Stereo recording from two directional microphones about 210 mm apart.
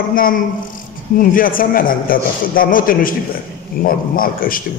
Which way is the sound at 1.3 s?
40° left (ahead or behind).